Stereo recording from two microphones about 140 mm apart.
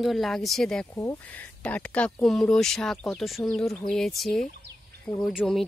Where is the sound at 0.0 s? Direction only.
Centre (ahead or behind).